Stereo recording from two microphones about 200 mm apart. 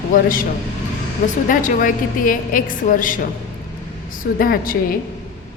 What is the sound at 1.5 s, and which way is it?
A woman's voice, 40° left (ahead or behind).